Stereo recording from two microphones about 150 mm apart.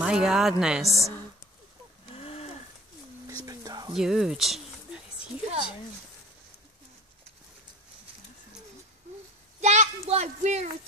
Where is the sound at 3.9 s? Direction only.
5° right (ahead or behind).